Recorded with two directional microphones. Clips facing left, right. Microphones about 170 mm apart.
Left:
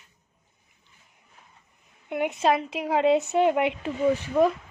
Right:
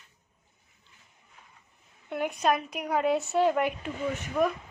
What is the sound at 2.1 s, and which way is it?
A woman's voice, 20° left (ahead or behind).